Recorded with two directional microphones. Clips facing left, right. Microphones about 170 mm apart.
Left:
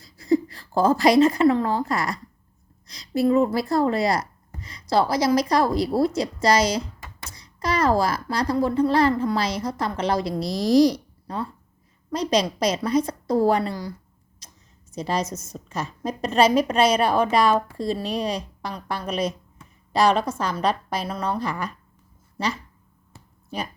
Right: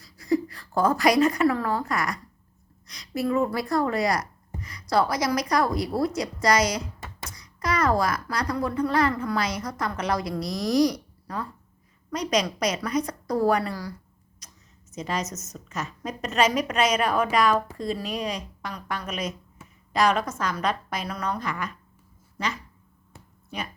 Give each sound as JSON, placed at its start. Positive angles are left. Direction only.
{"t": 0.0, "sound": "a child's voice", "side_deg": 30}
{"t": 14.4, "sound": "tick-tock", "side_deg": 30}
{"t": 14.9, "sound": "a woman's voice", "side_deg": 35}
{"t": 23.1, "sound": "a sound", "side_deg": 0}